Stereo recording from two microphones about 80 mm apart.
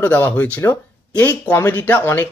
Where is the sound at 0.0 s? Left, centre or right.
Left.